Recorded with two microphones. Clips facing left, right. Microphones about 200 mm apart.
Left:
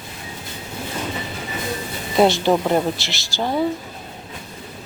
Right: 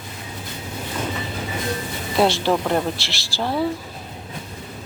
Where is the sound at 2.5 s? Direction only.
10° left (ahead or behind).